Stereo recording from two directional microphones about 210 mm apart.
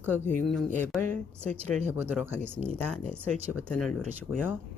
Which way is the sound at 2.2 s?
10° right (ahead or behind).